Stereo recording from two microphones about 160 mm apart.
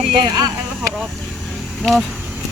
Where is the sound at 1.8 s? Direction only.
Centre (ahead or behind).